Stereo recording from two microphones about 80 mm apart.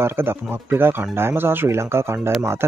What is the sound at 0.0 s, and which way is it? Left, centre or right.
Speech, right.